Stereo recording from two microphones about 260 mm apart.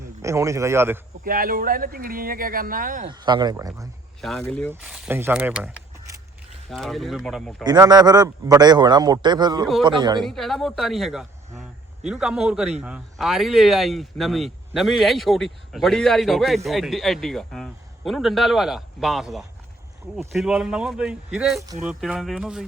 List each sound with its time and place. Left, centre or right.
0.2 s a man's voice: centre
1.2 s speech: right
3.1 s a man's voice: centre
4.2 s speech: centre
7.6 s a man's voice: centre
10.2 s speech: centre